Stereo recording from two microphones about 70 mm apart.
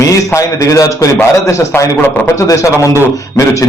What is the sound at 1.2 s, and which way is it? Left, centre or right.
A man's voice, left.